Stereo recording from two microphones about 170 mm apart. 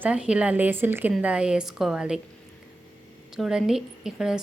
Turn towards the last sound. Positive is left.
turn(degrees=-5)  # may be behind; listen again after turning